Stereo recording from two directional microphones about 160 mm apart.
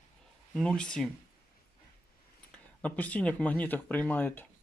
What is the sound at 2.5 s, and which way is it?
Speech, 10° left (ahead or behind).